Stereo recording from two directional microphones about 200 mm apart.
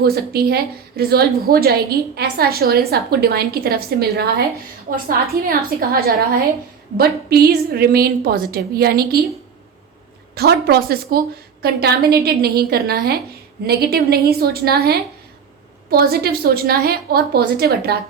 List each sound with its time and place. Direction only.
0.0 s a woman's voice: 50° right (ahead or behind)
10.3 s a woman's voice: 55° right (ahead or behind)